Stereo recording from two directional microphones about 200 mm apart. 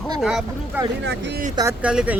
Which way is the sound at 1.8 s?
5° right (ahead or behind).